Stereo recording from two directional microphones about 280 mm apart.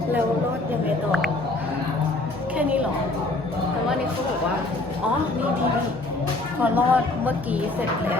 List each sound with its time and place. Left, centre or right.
6.6 s a woman's voice: centre